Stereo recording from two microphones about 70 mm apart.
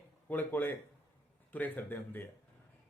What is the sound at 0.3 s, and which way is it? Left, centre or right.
Speech, left.